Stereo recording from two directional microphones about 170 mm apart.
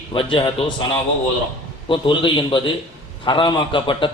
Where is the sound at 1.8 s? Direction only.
30° left (ahead or behind).